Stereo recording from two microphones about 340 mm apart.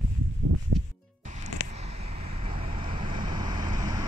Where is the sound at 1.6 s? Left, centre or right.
Centre.